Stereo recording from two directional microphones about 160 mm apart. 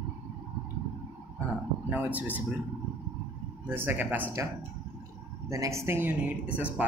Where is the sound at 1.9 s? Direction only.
10° right (ahead or behind).